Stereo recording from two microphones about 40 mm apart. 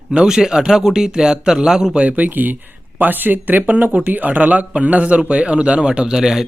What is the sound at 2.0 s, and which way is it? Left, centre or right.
A man's voice, right.